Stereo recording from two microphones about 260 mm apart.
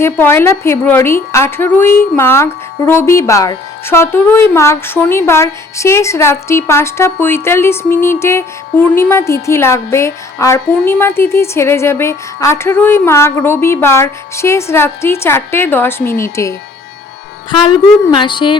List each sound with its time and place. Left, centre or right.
0.0 s a woman's voice: centre